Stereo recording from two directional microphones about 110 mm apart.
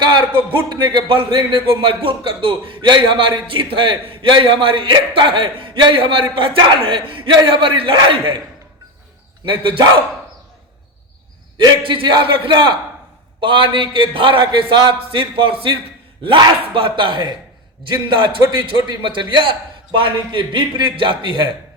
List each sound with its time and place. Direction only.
0.0 s a man's voice: 45° right (ahead or behind)
9.5 s a man's voice: 50° right (ahead or behind)
11.5 s a man's voice: 45° right (ahead or behind)